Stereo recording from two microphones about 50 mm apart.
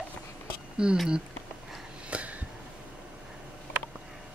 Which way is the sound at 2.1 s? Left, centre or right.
Right.